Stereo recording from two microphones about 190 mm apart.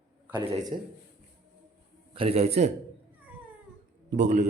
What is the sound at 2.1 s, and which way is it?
Speech, 30° right (ahead or behind).